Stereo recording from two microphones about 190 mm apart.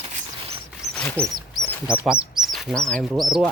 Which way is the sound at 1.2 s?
5° left (ahead or behind).